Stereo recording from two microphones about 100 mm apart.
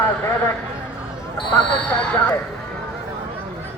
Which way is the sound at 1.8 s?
15° left (ahead or behind).